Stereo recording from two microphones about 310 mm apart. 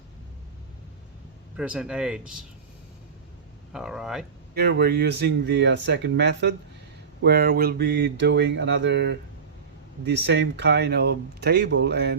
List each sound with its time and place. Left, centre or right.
1.5 s speech: centre
3.7 s speech: centre
4.5 s speech: right